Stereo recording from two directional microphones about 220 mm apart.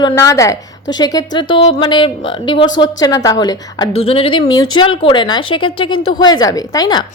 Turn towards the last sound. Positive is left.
turn(degrees=15)  # may be behind; listen again after turning